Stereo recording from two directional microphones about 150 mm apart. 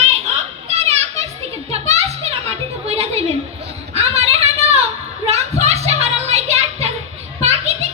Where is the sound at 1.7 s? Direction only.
45° right (ahead or behind).